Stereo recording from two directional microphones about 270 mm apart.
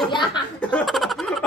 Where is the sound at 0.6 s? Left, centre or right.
Centre.